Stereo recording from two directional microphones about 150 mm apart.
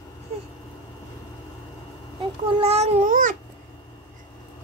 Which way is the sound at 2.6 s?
45° right (ahead or behind).